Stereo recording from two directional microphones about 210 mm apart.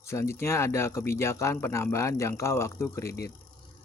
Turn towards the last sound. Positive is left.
turn(degrees=15)  # may be behind; listen again after turning